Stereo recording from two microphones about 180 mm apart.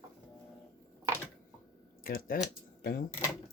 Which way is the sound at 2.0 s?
50° left (ahead or behind).